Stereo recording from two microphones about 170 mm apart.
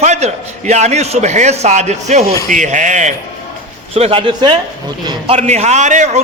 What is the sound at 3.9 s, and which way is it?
A man's voice, 35° right (ahead or behind).